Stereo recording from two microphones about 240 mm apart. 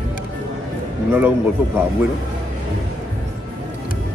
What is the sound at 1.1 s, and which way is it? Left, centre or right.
Music, centre.